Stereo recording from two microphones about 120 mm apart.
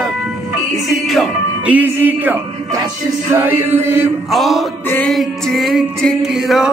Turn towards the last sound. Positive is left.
turn(degrees=-5)  # may be behind; listen again after turning